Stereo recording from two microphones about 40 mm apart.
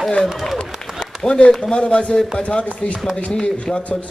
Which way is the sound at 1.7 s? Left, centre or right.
Left.